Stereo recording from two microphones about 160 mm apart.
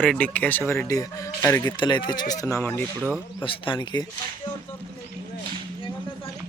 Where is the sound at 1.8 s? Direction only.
30° left (ahead or behind); by 2.8 s 15° left (ahead or behind).